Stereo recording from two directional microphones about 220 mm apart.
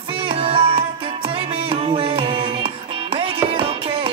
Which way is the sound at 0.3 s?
25° right (ahead or behind).